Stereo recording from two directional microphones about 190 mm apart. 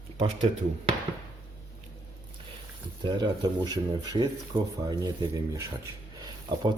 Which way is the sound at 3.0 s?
25° right (ahead or behind).